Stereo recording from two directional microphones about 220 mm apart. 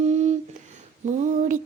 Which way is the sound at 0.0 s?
30° right (ahead or behind).